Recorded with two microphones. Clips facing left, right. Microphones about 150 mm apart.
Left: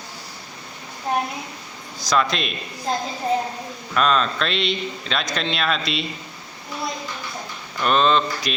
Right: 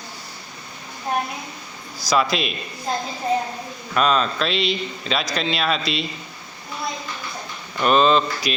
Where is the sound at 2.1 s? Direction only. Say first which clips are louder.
Right 1 dB; 5° right (ahead or behind).